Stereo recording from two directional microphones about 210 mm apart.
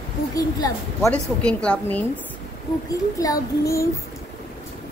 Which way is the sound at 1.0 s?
5° left (ahead or behind).